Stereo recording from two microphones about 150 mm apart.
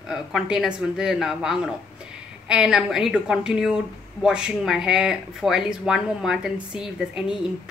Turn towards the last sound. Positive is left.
turn(degrees=-5)  # may be behind; listen again after turning